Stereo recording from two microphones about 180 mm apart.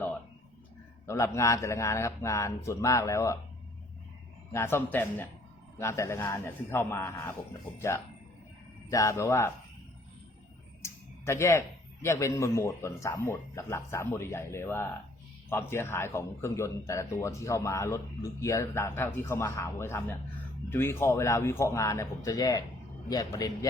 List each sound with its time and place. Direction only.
1.0 s speech: 15° left (ahead or behind)
4.5 s speech: 15° left (ahead or behind)
10.8 s a sound: 15° left (ahead or behind)
12.0 s a man's voice: 15° left (ahead or behind)